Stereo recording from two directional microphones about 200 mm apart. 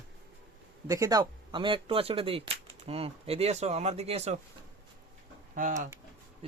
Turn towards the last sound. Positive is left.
turn(degrees=-40)  # may be behind; listen again after turning